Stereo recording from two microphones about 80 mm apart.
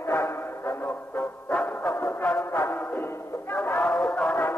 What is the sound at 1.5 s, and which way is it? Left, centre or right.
Music, centre.